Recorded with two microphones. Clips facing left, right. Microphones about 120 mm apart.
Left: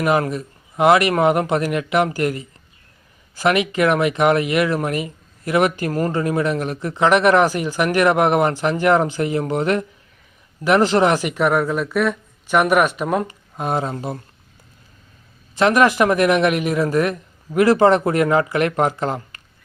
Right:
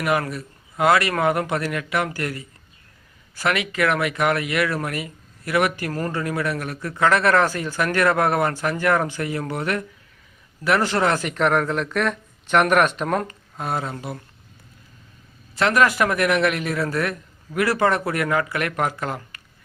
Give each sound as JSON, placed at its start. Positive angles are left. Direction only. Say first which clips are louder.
{"t": 0.0, "sound": "a man's voice", "louder": "left 4 dB", "side_deg": 20}
{"t": 13.6, "sound": "a man's voice", "louder": "left 5 dB", "side_deg": 20}
{"t": 15.5, "sound": "a man's voice", "louder": "left 4 dB", "side_deg": 20}